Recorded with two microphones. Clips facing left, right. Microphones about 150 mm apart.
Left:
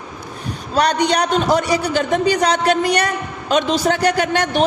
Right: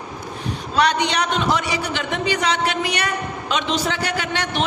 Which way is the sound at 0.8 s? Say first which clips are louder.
Left 3 dB; 40° left (ahead or behind).